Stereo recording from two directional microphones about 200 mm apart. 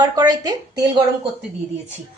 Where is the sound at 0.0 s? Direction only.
20° right (ahead or behind).